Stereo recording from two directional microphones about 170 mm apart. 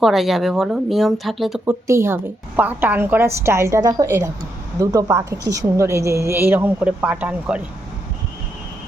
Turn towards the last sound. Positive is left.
turn(degrees=-10)  # may be behind; listen again after turning